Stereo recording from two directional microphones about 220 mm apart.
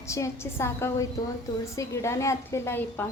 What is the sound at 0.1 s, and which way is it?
Speech, 10° left (ahead or behind).